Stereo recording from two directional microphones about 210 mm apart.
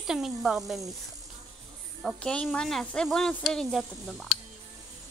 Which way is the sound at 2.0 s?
Centre (ahead or behind).